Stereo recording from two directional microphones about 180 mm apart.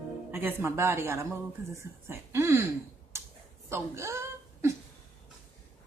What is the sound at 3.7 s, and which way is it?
Speech, 15° right (ahead or behind).